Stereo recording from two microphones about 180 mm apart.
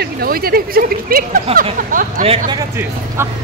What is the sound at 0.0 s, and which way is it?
Speech, 60° right (ahead or behind).